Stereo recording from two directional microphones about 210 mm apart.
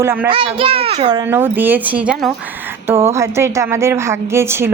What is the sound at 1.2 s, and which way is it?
A woman's voice, 10° right (ahead or behind).